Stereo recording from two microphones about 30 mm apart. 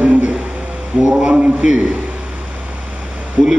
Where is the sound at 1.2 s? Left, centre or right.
Right.